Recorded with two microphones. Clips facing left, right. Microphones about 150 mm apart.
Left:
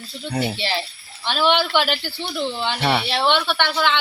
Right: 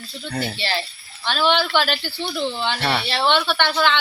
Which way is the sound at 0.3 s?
15° left (ahead or behind).